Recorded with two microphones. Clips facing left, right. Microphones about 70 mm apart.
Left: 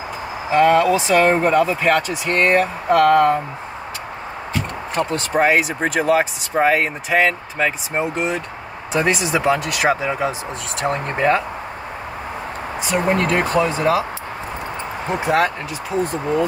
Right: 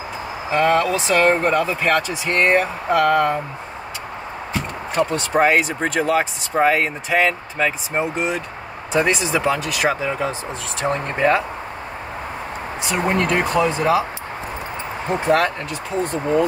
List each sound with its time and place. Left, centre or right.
0.5 s speech: centre
4.9 s speech: centre
12.8 s speech: centre
15.1 s speech: centre